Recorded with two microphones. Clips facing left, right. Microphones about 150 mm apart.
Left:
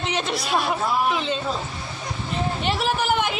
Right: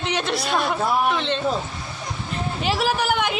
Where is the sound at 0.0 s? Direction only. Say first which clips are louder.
Right 1 dB; centre (ahead or behind).